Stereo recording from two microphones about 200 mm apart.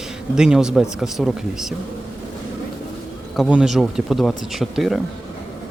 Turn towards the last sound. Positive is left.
turn(degrees=0)  # may be behind; listen again after turning